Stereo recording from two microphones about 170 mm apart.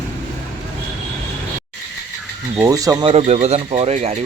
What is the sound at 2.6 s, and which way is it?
Speech, 20° right (ahead or behind).